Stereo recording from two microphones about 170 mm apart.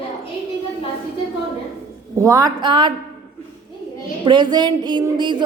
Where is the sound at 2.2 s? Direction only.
20° right (ahead or behind).